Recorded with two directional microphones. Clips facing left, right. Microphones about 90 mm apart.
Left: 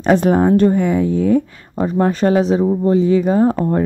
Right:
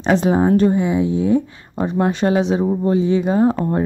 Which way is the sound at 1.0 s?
50° left (ahead or behind).